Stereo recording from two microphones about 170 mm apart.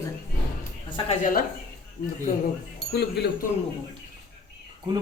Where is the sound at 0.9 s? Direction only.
50° left (ahead or behind).